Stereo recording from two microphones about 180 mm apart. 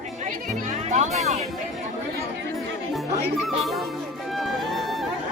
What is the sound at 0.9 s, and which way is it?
Speech, 40° right (ahead or behind).